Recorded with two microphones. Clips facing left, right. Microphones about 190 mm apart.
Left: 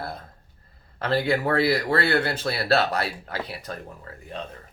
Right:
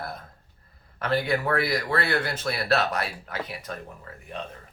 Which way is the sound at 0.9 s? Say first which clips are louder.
Left 2 dB; 30° left (ahead or behind).